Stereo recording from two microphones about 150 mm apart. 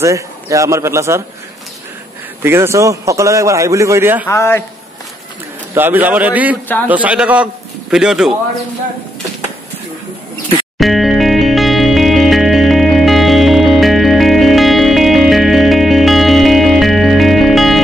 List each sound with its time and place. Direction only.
0.0 s a man's voice: 20° right (ahead or behind)
2.4 s a man's voice: 15° right (ahead or behind)
4.3 s a man's voice: 15° left (ahead or behind)
5.8 s a man's voice: 15° right (ahead or behind)
10.8 s music: centre (ahead or behind)